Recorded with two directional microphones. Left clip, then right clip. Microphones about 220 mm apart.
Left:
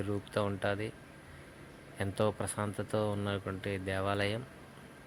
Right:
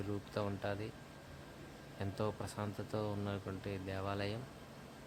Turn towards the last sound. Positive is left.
turn(degrees=15)  # may be behind; listen again after turning